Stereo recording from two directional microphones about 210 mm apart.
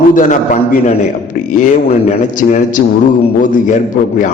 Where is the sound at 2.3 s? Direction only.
40° left (ahead or behind).